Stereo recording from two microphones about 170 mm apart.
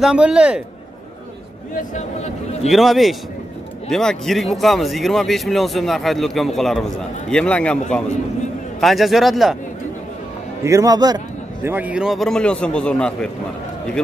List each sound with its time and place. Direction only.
0.0 s a man's voice: 5° right (ahead or behind)
2.0 s speech: 40° left (ahead or behind)
2.7 s a man's voice: centre (ahead or behind)
8.8 s a man's voice: centre (ahead or behind)
10.6 s a man's voice: 20° right (ahead or behind)
11.6 s a man's voice: 10° right (ahead or behind)